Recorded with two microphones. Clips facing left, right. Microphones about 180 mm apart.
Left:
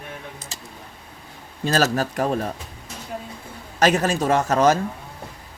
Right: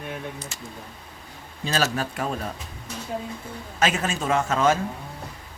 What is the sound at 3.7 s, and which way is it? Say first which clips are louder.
A man's voice: left 6 dB; 40° left (ahead or behind).